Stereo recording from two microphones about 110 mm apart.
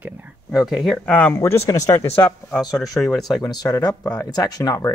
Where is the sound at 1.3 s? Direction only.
25° left (ahead or behind).